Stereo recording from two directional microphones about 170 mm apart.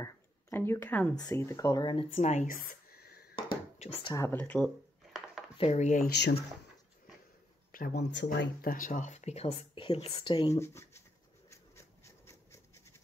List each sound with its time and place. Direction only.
0.0 s a sound: 15° left (ahead or behind)
1.1 s speech: 20° left (ahead or behind)
2.1 s a sound: 40° left (ahead or behind); by 3.5 s 60° left (ahead or behind)
3.7 s speech: 40° left (ahead or behind)
4.1 s speech: 15° left (ahead or behind)
5.6 s speech: 40° left (ahead or behind)
6.0 s speech: 75° left (ahead or behind)
7.7 s speech: 60° left (ahead or behind); by 10.5 s 30° left (ahead or behind)
10.5 s speech: 15° left (ahead or behind)
11.5 s scratch: 15° left (ahead or behind)